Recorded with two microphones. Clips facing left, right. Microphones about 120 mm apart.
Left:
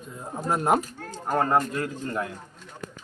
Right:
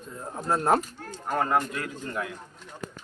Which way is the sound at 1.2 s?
30° left (ahead or behind).